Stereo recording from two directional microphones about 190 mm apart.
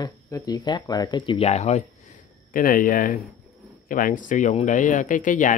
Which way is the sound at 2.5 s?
45° left (ahead or behind).